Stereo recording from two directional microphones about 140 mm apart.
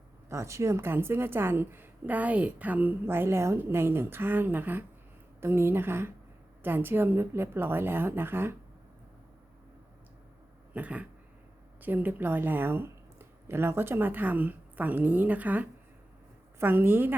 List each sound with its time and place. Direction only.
0.3 s a woman's voice: 20° right (ahead or behind)
10.8 s a woman's voice: 10° right (ahead or behind)